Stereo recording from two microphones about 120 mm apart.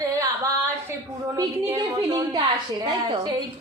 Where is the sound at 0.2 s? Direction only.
25° right (ahead or behind).